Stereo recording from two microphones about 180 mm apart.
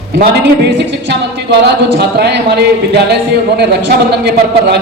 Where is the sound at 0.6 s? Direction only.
75° right (ahead or behind).